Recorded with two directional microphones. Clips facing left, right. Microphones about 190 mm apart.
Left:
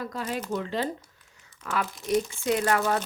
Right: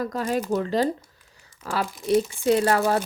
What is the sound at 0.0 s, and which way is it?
A woman's voice, 45° right (ahead or behind).